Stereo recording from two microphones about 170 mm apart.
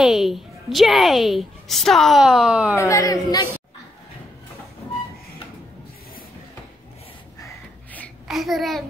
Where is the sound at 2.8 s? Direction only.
20° left (ahead or behind).